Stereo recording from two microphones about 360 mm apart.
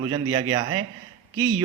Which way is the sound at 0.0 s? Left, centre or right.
Centre.